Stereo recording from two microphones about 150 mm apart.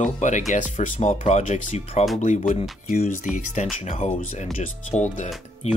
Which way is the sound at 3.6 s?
55° left (ahead or behind).